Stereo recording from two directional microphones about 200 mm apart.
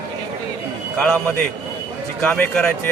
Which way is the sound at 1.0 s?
5° left (ahead or behind).